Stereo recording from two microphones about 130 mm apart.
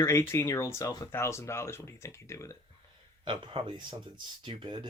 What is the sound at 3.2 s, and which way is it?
Speech, 40° right (ahead or behind).